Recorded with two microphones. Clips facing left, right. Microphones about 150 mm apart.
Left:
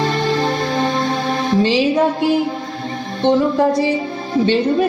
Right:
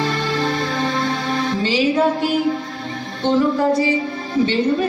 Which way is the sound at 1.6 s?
20° left (ahead or behind).